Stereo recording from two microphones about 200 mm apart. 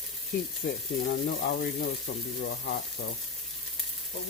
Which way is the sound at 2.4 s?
55° left (ahead or behind).